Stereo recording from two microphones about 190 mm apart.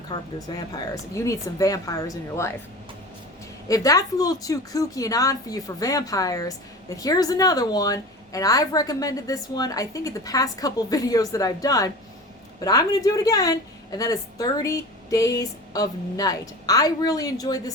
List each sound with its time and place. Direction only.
0.1 s a woman's voice: 20° left (ahead or behind)
3.7 s a woman's voice: 20° left (ahead or behind)